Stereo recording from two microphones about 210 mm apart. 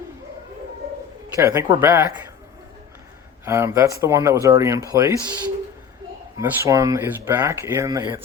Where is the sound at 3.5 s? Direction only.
15° right (ahead or behind).